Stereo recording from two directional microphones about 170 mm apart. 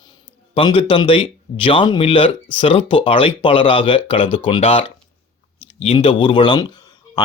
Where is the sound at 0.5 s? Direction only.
30° left (ahead or behind).